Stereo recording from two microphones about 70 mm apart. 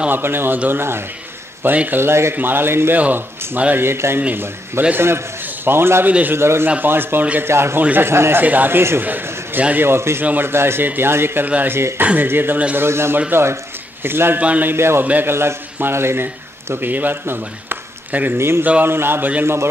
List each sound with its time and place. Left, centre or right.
0.1 s speech: right
6.0 s speech: right
6.3 s speech: right
7.8 s a man's voice: right
9.8 s speech: right
11.4 s speech: right
14.4 s speech: right
15.3 s a man's voice: right